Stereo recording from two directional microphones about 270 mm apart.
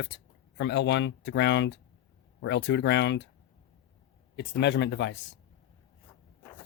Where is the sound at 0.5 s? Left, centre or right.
Left.